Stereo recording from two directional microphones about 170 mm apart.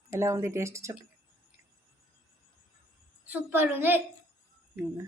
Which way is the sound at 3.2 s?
10° right (ahead or behind).